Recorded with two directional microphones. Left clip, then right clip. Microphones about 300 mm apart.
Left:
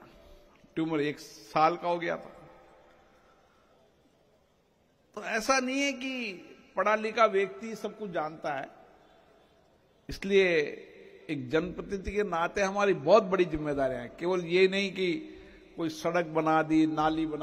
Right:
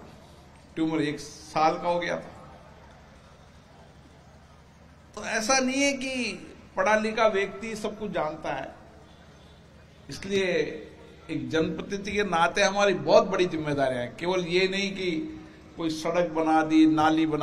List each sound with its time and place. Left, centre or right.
0.7 s a man's voice: left
5.1 s a man's voice: left
10.0 s a man's voice: left
15.8 s a man's voice: left